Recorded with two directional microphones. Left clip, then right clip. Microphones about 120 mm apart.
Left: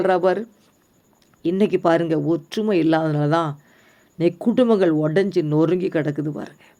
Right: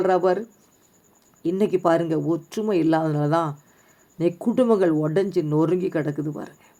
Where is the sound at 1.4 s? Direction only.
30° left (ahead or behind).